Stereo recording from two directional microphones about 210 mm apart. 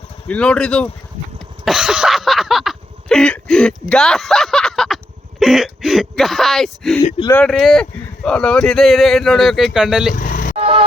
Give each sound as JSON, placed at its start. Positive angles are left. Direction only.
{"t": 0.3, "sound": "speech", "side_deg": 5}
{"t": 1.6, "sound": "a sound", "side_deg": 0}
{"t": 5.4, "sound": "speech", "side_deg": 0}
{"t": 10.2, "sound": "vehicle", "side_deg": 40}
{"t": 10.6, "sound": "music", "side_deg": -25}